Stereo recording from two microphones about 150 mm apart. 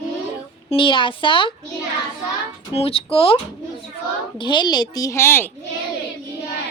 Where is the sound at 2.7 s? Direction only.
40° left (ahead or behind).